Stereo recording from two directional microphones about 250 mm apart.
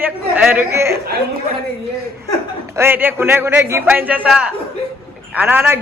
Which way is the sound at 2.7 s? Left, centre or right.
Centre.